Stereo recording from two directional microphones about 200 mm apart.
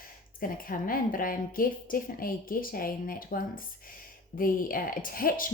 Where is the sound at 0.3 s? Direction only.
45° left (ahead or behind).